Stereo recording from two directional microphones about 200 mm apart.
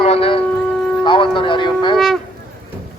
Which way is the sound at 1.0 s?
25° left (ahead or behind).